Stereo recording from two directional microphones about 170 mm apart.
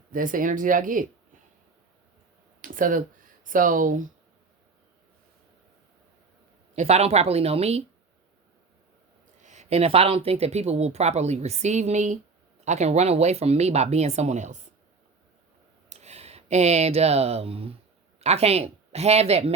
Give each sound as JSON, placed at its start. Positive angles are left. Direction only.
{"t": 0.1, "sound": "speech", "side_deg": -50}
{"t": 2.6, "sound": "a sound", "side_deg": -50}
{"t": 3.4, "sound": "speech", "side_deg": -50}
{"t": 6.7, "sound": "speech", "side_deg": -35}
{"t": 9.4, "sound": "speech", "side_deg": -45}
{"t": 15.9, "sound": "speech", "side_deg": -40}